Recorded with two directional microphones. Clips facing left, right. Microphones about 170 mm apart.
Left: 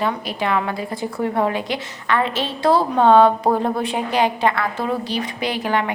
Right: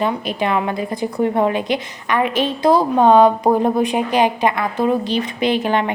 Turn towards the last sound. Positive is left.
turn(degrees=-25)  # may be behind; listen again after turning